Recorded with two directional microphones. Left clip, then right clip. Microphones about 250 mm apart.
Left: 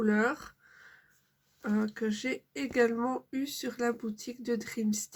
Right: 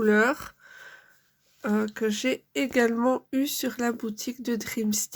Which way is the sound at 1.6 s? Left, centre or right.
Right.